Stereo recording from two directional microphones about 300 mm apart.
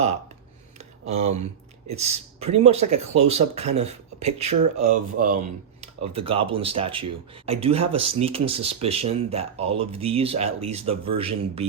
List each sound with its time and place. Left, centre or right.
1.0 s speech: right